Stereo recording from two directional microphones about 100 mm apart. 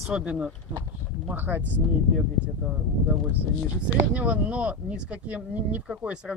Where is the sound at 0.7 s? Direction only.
50° right (ahead or behind).